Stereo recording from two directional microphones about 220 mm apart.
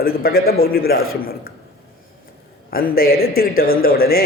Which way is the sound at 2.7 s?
40° left (ahead or behind).